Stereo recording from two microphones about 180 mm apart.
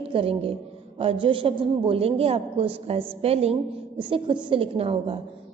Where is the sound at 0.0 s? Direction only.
30° right (ahead or behind).